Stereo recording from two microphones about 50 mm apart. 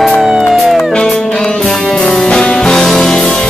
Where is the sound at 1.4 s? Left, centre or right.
Centre.